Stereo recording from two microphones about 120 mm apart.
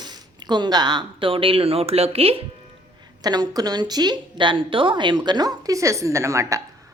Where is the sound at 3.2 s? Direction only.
35° right (ahead or behind).